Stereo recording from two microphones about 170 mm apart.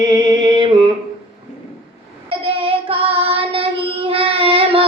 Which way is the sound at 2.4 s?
30° right (ahead or behind).